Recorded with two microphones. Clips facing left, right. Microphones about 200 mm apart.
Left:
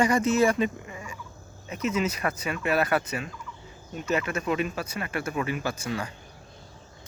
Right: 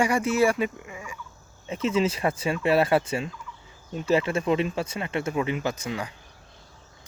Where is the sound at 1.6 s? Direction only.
25° right (ahead or behind).